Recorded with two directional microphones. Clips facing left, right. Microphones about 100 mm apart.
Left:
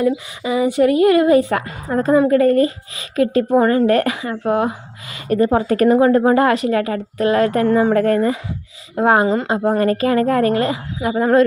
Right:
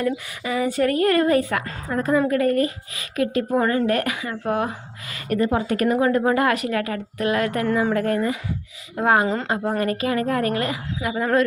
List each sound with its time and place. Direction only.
0.0 s speech: 20° left (ahead or behind)
5.4 s speech: 40° left (ahead or behind)
9.0 s speech: 25° left (ahead or behind)
9.8 s speech: 40° left (ahead or behind)